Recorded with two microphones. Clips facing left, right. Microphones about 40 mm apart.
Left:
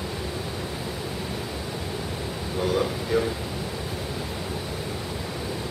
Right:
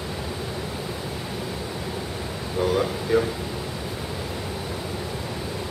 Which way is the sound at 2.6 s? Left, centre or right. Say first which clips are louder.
Right 2 dB; centre.